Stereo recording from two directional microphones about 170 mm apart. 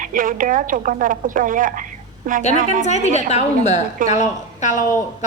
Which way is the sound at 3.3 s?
40° left (ahead or behind).